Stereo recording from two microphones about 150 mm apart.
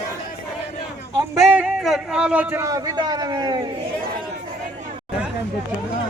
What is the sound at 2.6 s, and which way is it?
A man's voice, 25° right (ahead or behind).